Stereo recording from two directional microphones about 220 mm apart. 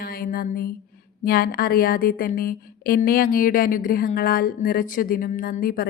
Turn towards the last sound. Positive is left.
turn(degrees=40)  # may be behind; listen again after turning